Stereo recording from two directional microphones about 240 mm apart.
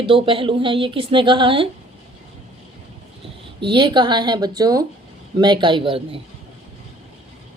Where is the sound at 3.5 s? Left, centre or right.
Centre.